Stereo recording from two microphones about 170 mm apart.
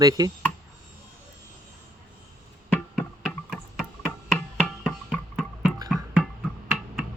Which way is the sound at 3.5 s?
Centre (ahead or behind).